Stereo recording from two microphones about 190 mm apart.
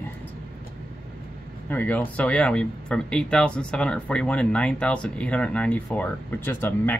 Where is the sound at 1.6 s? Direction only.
10° left (ahead or behind).